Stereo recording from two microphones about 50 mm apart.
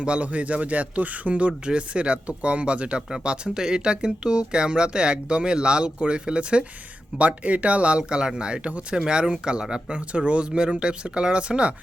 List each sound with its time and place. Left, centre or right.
0.0 s speech: right